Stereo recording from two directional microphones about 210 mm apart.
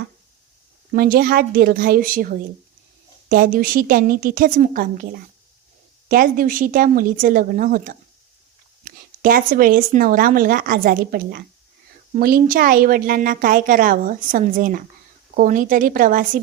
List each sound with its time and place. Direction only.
0.9 s a woman's voice: 45° right (ahead or behind)
6.1 s a woman's voice: 45° right (ahead or behind)